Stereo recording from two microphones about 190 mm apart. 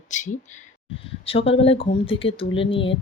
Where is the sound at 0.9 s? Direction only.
30° left (ahead or behind).